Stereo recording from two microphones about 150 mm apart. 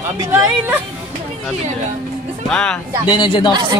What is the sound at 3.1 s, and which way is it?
Speech, 30° left (ahead or behind).